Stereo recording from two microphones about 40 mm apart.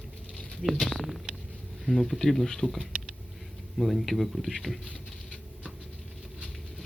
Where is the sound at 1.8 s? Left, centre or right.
Centre.